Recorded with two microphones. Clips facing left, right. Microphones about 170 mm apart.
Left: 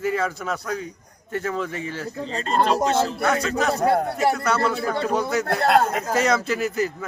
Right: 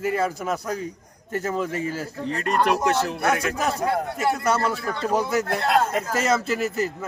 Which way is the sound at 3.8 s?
35° left (ahead or behind).